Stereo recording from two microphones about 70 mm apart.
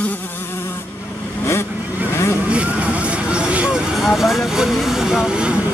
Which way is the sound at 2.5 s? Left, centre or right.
Centre.